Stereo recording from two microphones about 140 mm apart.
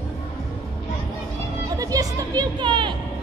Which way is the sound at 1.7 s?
25° right (ahead or behind).